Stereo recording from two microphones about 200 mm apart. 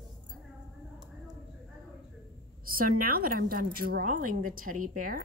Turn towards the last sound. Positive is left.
turn(degrees=-45)  # may be behind; listen again after turning